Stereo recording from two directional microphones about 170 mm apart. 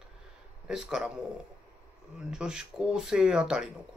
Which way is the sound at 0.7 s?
5° right (ahead or behind).